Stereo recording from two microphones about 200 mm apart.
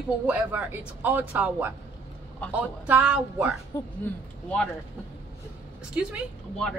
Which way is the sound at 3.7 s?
15° left (ahead or behind).